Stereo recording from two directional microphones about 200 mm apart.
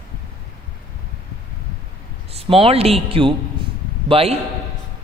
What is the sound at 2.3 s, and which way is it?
Speech, 30° right (ahead or behind).